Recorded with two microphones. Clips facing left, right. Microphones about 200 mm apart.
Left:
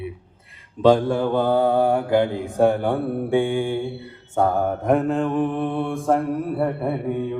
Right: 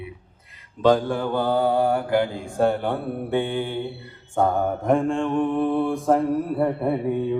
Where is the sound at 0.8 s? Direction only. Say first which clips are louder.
Left 3 dB; 25° left (ahead or behind); by 6.9 s centre (ahead or behind).